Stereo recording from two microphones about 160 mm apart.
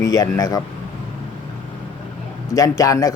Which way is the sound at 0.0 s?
20° left (ahead or behind).